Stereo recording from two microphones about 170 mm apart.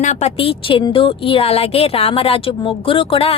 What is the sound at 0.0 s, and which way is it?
A woman's voice, 40° left (ahead or behind).